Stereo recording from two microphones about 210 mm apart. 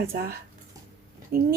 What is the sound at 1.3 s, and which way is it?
Speech, 45° right (ahead or behind).